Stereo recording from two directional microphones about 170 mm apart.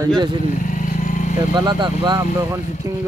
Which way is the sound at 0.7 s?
50° left (ahead or behind).